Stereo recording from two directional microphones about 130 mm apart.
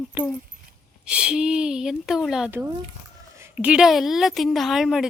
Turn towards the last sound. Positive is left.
turn(degrees=-5)  # may be behind; listen again after turning